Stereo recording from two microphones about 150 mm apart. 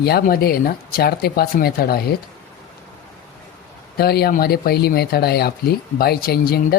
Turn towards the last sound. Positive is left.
turn(degrees=85)